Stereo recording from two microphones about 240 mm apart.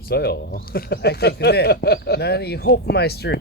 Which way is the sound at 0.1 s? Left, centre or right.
Left.